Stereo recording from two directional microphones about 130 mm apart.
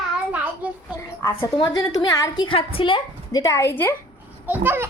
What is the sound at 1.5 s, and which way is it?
Speech, 35° left (ahead or behind).